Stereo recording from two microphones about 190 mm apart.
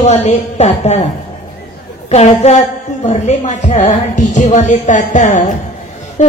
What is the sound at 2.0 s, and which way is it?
A woman's voice, 35° left (ahead or behind).